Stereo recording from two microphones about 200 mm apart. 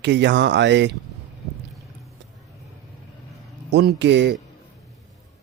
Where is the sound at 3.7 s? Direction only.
60° right (ahead or behind).